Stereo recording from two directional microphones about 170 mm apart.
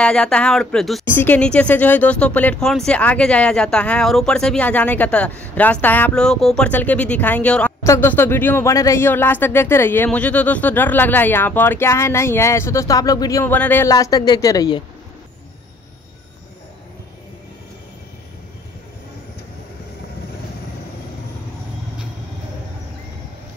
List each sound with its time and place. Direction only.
0.0 s speech: 5° left (ahead or behind)
1.0 s speech: 10° left (ahead or behind)